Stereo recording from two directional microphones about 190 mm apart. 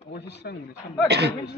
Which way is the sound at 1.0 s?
60° right (ahead or behind).